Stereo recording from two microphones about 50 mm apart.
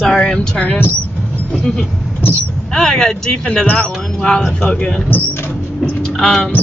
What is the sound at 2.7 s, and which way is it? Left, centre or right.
Speech, centre.